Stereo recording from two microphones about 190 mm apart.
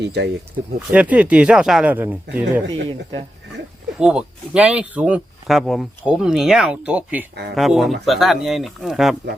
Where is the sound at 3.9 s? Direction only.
5° right (ahead or behind).